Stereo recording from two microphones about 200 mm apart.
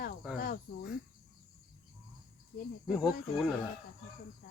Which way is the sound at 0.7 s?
50° left (ahead or behind).